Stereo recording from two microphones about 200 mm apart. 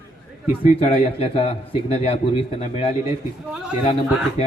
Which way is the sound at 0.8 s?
30° left (ahead or behind).